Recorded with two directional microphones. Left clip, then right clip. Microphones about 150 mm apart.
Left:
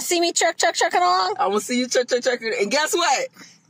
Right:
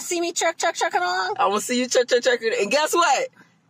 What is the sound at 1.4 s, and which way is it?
Speech, 10° right (ahead or behind).